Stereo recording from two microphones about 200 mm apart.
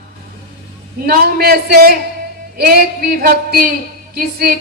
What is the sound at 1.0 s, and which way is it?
A man's voice, 50° right (ahead or behind).